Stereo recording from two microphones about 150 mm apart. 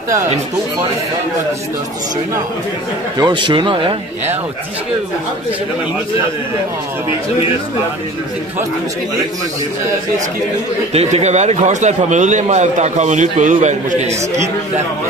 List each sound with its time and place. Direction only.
3.2 s a man's voice: 30° right (ahead or behind)
10.9 s a man's voice: 45° right (ahead or behind)